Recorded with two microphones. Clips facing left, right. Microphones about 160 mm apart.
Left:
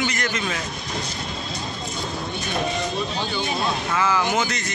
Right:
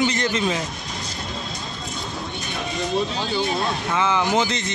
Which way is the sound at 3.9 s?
25° right (ahead or behind).